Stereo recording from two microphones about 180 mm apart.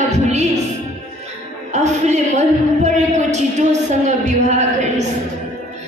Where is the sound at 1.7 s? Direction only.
40° right (ahead or behind).